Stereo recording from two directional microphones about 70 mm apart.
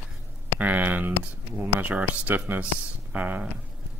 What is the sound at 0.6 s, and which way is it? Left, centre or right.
Speech, right.